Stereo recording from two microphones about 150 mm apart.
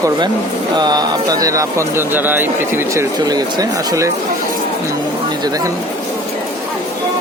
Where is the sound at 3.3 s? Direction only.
25° right (ahead or behind).